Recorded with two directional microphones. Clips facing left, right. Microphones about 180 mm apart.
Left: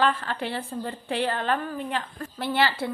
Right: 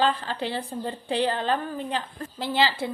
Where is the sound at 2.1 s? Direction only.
20° right (ahead or behind).